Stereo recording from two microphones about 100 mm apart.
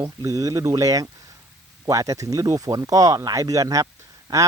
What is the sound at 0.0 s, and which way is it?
Speech, 40° right (ahead or behind).